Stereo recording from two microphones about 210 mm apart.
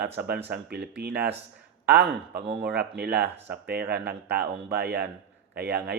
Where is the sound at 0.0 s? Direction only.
50° right (ahead or behind).